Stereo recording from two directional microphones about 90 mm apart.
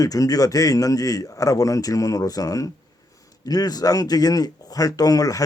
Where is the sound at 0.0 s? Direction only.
40° left (ahead or behind).